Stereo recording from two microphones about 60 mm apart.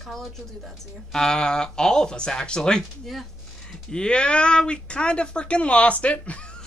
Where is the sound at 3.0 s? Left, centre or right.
Centre.